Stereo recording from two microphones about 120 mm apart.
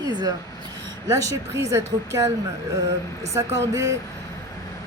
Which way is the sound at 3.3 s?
25° right (ahead or behind).